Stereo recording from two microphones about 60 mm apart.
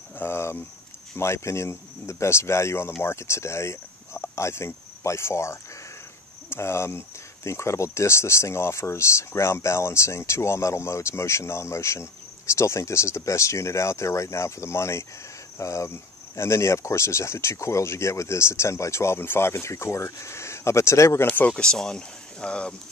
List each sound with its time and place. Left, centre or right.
0.1 s a sound: left
1.1 s speech: left
21.3 s speech: left